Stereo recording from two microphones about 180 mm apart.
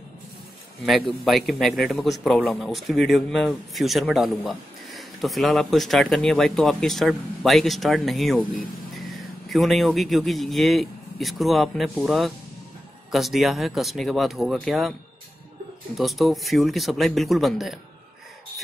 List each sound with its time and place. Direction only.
0.8 s a man's voice: centre (ahead or behind)
16.0 s a man's voice: centre (ahead or behind)